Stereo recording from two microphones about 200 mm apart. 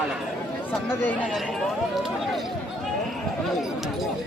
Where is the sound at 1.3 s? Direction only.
Centre (ahead or behind).